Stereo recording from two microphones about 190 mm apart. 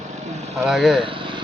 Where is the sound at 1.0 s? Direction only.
25° right (ahead or behind).